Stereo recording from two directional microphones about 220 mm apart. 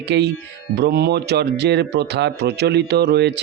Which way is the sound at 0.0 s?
50° right (ahead or behind).